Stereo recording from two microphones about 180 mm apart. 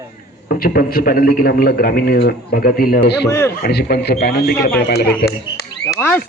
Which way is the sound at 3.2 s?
15° left (ahead or behind).